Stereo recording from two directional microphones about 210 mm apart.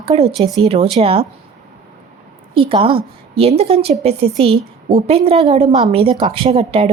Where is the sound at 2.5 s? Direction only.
25° right (ahead or behind).